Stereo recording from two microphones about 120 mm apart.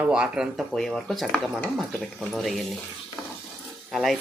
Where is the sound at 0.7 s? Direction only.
5° left (ahead or behind).